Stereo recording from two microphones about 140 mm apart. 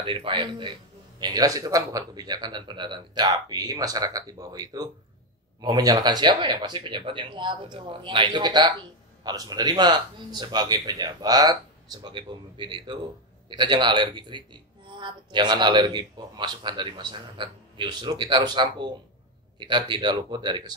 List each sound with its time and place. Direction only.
0.0 s speech: 35° right (ahead or behind)